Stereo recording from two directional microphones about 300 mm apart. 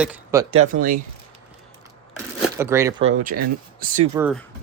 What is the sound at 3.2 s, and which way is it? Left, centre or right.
Speech, right.